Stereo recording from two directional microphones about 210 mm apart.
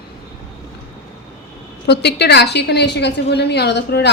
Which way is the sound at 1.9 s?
50° left (ahead or behind).